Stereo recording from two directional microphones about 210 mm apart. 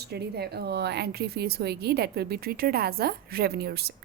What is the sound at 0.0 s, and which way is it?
Speech, 50° right (ahead or behind).